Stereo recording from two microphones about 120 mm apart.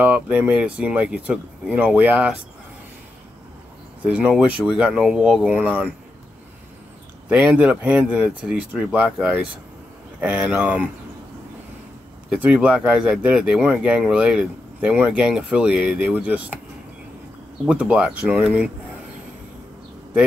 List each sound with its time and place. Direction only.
0.0 s speech: 15° right (ahead or behind)
4.0 s speech: 10° right (ahead or behind)
7.2 s speech: 10° right (ahead or behind)
12.4 s speech: 10° right (ahead or behind)
17.6 s speech: 10° right (ahead or behind)